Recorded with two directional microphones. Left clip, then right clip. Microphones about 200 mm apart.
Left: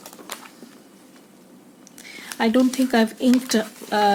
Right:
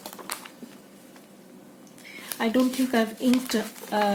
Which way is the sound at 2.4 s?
55° left (ahead or behind).